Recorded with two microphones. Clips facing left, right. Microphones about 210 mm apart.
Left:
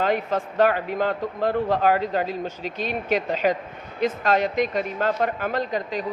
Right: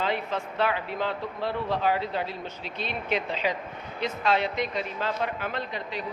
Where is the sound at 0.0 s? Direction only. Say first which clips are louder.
Left 6 dB; 45° left (ahead or behind).